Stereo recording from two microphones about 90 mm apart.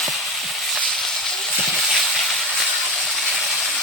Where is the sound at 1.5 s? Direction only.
5° right (ahead or behind).